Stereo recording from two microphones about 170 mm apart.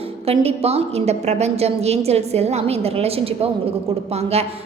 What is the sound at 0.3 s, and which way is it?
A woman's voice, 35° right (ahead or behind).